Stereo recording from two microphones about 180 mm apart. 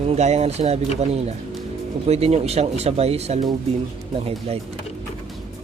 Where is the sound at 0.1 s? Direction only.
35° right (ahead or behind).